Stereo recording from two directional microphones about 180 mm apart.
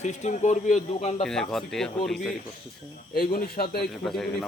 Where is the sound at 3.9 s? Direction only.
Centre (ahead or behind).